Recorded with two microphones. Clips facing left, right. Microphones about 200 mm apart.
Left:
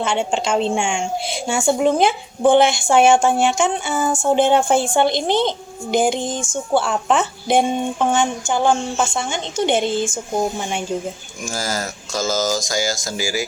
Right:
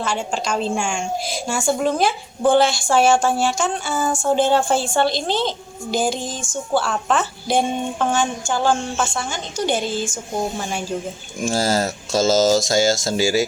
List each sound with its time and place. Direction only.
0.0 s a woman's voice: 25° left (ahead or behind)
11.4 s speech: 30° right (ahead or behind)